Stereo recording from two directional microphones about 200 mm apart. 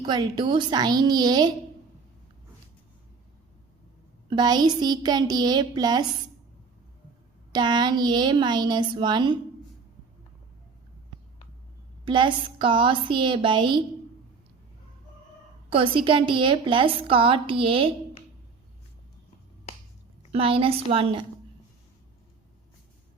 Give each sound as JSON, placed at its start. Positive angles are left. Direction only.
{"t": 0.0, "sound": "a woman's voice", "side_deg": -20}
{"t": 4.3, "sound": "a woman's voice", "side_deg": -20}
{"t": 7.5, "sound": "a woman's voice", "side_deg": -20}
{"t": 12.0, "sound": "a woman's voice", "side_deg": -25}
{"t": 15.7, "sound": "a woman's voice", "side_deg": -25}
{"t": 20.3, "sound": "a woman's voice", "side_deg": -25}